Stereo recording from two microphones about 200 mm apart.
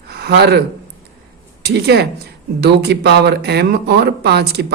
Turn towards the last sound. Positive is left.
turn(degrees=-55)  # may be behind; listen again after turning